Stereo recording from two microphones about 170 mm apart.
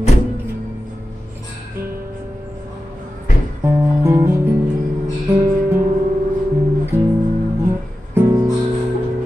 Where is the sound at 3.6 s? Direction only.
15° right (ahead or behind).